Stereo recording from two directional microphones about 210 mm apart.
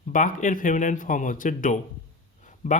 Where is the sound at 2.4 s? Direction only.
35° left (ahead or behind).